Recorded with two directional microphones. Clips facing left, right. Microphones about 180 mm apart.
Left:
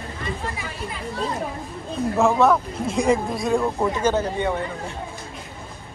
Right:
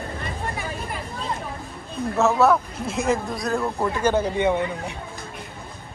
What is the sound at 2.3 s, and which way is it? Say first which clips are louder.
A man's voice: even; 5° right (ahead or behind).